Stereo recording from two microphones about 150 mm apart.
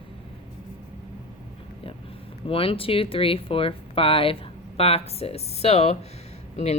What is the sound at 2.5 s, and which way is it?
Speech, 40° left (ahead or behind).